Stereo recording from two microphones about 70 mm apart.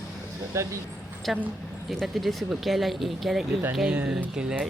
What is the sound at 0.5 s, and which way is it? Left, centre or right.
Speech, right.